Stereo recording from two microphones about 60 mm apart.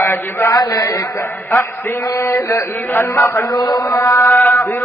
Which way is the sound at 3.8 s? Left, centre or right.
Left.